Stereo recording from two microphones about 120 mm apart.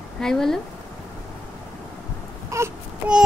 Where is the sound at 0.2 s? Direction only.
5° left (ahead or behind).